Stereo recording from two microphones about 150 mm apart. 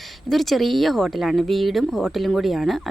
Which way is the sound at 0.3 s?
Centre (ahead or behind).